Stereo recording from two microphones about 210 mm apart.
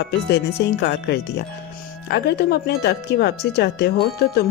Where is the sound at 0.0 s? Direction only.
55° left (ahead or behind).